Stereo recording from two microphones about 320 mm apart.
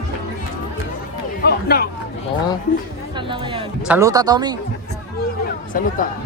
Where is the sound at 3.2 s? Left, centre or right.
Centre.